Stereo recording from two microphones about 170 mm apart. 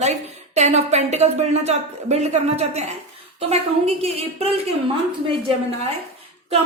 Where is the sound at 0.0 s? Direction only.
40° right (ahead or behind).